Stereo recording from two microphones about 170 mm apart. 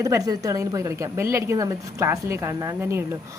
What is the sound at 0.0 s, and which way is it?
A woman's voice, 20° right (ahead or behind).